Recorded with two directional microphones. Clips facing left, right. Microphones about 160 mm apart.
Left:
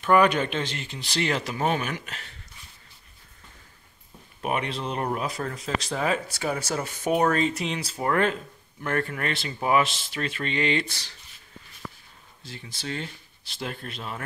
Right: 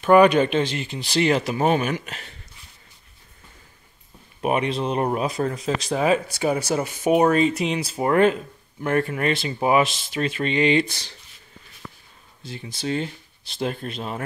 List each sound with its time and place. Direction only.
0.0 s speech: 20° right (ahead or behind)
4.4 s speech: 20° right (ahead or behind)
12.4 s speech: 15° right (ahead or behind)